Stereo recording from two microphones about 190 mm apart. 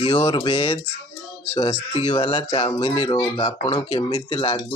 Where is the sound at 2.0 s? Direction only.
30° left (ahead or behind).